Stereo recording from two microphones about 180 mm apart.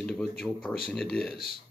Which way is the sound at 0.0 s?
5° left (ahead or behind).